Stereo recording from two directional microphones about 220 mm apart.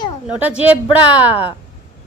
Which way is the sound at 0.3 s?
5° right (ahead or behind).